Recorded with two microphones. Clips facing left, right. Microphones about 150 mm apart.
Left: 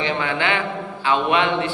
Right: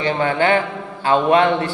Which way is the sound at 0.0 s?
40° right (ahead or behind).